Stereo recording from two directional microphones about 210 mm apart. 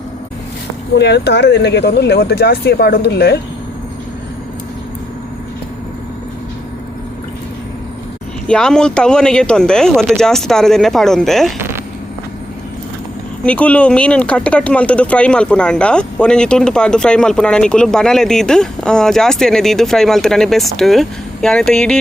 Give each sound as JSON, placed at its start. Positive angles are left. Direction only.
{"t": 0.9, "sound": "speech", "side_deg": 55}
{"t": 8.4, "sound": "speech", "side_deg": 5}
{"t": 13.4, "sound": "speech", "side_deg": 5}